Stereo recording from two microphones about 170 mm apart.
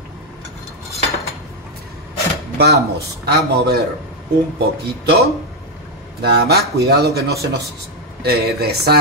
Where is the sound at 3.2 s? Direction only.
70° right (ahead or behind).